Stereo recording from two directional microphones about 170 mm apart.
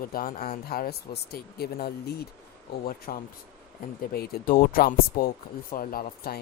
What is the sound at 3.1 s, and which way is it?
Speech, 50° left (ahead or behind).